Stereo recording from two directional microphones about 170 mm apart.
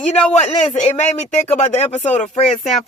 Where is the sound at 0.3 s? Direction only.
40° left (ahead or behind).